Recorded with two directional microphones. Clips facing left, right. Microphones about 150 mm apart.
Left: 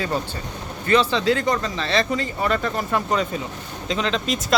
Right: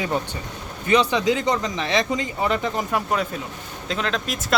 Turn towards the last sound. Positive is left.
turn(degrees=0)  # may be behind; listen again after turning